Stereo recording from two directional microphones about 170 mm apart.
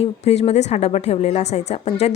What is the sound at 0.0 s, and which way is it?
A woman's voice, 35° left (ahead or behind).